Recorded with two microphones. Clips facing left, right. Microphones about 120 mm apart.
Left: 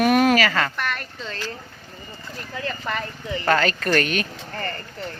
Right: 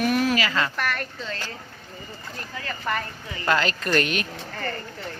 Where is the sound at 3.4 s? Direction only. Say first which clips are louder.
Left 3 dB; 40° left (ahead or behind).